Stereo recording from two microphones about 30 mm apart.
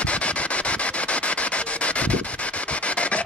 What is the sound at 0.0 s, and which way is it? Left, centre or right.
Rub, left.